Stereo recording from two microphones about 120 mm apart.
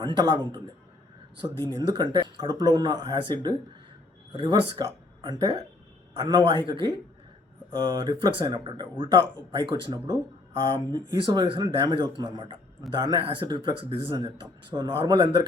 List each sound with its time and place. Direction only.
0.0 s speech: 40° right (ahead or behind)
1.6 s speech: 35° right (ahead or behind)